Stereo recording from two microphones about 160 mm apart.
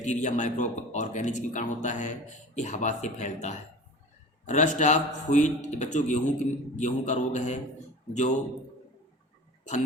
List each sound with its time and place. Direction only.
0.0 s speech: 50° left (ahead or behind)